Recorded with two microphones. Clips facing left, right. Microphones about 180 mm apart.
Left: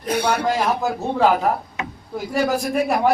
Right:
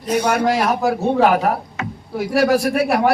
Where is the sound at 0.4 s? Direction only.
75° right (ahead or behind).